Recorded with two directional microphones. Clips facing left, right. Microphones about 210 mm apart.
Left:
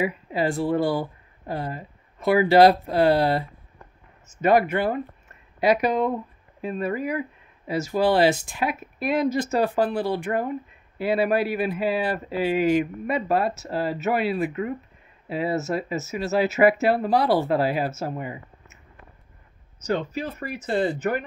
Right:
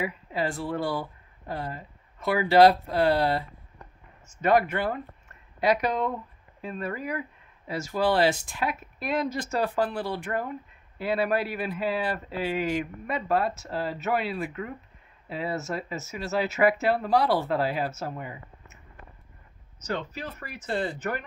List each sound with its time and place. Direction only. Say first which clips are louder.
0.0 s speech: left 5 dB; 10° left (ahead or behind)
9.9 s speech: left 6 dB; 25° left (ahead or behind)
11.0 s speech: left 4 dB; 5° left (ahead or behind)
19.8 s speech: left 6 dB; 10° left (ahead or behind)